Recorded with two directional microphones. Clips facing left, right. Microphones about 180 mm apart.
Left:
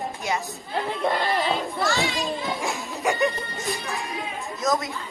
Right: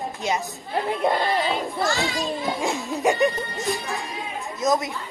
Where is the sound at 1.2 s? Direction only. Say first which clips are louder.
Right 1 dB; centre (ahead or behind).